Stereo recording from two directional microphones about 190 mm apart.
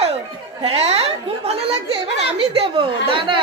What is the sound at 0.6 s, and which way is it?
A woman's voice, 30° right (ahead or behind).